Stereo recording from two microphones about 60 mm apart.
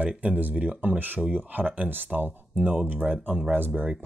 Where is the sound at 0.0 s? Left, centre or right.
Right.